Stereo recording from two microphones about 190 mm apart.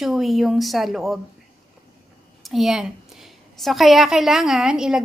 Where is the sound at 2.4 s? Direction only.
Centre (ahead or behind).